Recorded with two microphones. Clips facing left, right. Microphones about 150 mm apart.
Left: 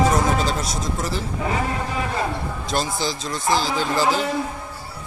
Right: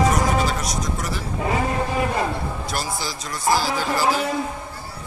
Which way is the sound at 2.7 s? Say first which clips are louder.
Left 8 dB; 25° left (ahead or behind).